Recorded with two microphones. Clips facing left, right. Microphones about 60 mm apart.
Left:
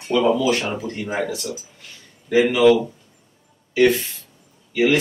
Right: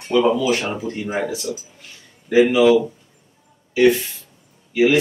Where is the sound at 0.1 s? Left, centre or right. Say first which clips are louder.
Right 1 dB; centre.